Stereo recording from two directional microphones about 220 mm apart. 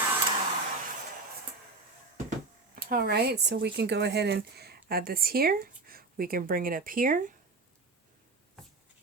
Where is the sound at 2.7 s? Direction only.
40° right (ahead or behind).